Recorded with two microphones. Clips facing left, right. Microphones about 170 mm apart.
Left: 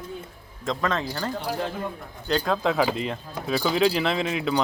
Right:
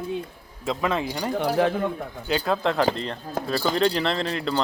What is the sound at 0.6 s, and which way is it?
Speech, 10° right (ahead or behind).